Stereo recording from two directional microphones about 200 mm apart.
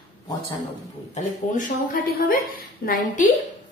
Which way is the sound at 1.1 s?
40° left (ahead or behind).